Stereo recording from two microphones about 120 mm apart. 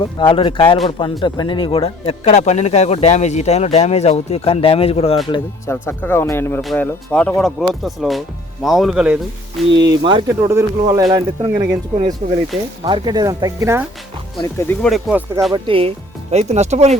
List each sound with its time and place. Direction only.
0.0 s a man's voice: 45° left (ahead or behind)
5.7 s speech: 15° left (ahead or behind); by 9.7 s centre (ahead or behind)
9.9 s speech: 40° right (ahead or behind)
10.2 s speech: 25° right (ahead or behind)
14.4 s speech: 20° left (ahead or behind)
14.8 s speech: centre (ahead or behind)
15.5 s speech: 45° right (ahead or behind)
16.3 s speech: 65° right (ahead or behind)